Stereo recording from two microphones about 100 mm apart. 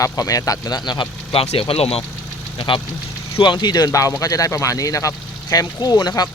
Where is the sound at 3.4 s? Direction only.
50° left (ahead or behind).